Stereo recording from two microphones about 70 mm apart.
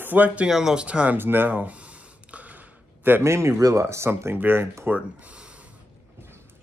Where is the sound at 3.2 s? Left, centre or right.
Right.